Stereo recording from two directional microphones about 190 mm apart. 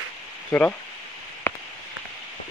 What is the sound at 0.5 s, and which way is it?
Speech, 15° left (ahead or behind).